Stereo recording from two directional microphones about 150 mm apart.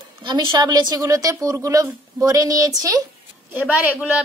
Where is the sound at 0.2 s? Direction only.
30° right (ahead or behind).